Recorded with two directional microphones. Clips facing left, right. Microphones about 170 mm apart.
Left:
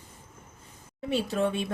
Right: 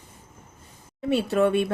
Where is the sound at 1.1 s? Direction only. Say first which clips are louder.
Right 6 dB; 60° right (ahead or behind).